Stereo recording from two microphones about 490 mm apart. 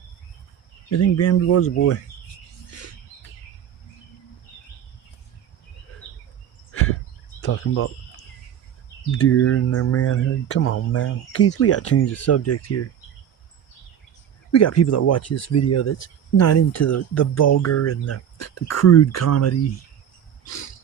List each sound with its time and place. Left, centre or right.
0.9 s speech: left
6.7 s a sound: left
7.4 s speech: left
9.1 s speech: left
14.5 s speech: left